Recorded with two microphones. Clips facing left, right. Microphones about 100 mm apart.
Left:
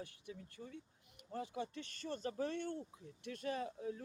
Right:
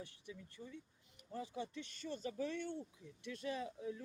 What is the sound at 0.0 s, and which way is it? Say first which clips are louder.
Speech: left 2 dB; 50° left (ahead or behind).